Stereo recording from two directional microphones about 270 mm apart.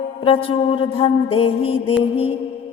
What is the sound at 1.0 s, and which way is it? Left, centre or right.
Music, left.